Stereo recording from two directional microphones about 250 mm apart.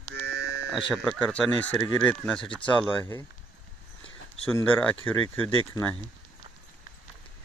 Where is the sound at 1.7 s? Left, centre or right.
Centre.